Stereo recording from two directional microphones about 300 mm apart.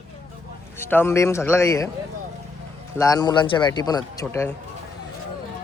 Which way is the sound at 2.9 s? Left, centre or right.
Centre.